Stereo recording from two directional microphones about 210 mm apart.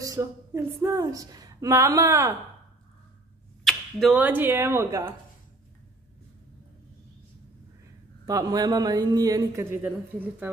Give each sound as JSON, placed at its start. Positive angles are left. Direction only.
{"t": 0.0, "sound": "speech", "side_deg": -15}
{"t": 3.6, "sound": "speech", "side_deg": -5}
{"t": 8.3, "sound": "speech", "side_deg": -15}